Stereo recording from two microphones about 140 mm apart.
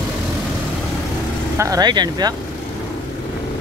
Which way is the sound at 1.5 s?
25° right (ahead or behind).